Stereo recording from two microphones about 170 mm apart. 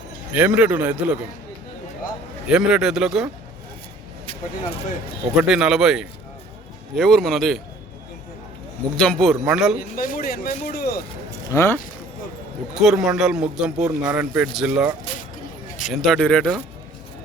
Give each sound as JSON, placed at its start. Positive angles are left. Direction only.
{"t": 0.3, "sound": "a man's voice", "side_deg": -10}
{"t": 2.5, "sound": "a man's voice", "side_deg": -5}
{"t": 5.4, "sound": "a man's voice", "side_deg": -5}
{"t": 9.0, "sound": "a man's voice", "side_deg": 5}
{"t": 9.9, "sound": "speech", "side_deg": 55}
{"t": 11.4, "sound": "speech", "side_deg": 15}
{"t": 12.8, "sound": "a man's voice", "side_deg": 0}
{"t": 15.9, "sound": "a man's voice", "side_deg": 0}